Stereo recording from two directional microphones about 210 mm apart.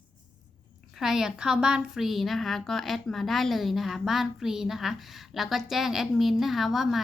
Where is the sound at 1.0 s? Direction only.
Centre (ahead or behind).